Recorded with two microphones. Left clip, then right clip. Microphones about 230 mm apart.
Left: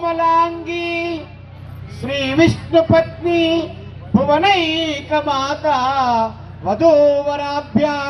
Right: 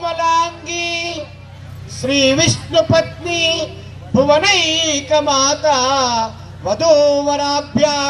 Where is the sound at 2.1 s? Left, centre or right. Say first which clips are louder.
Right 2 dB; right.